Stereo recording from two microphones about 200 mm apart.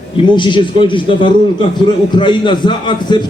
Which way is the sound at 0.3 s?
25° left (ahead or behind).